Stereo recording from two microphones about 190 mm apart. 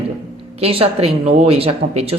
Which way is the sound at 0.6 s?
30° right (ahead or behind).